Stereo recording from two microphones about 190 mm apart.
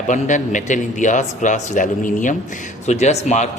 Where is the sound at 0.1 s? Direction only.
40° left (ahead or behind).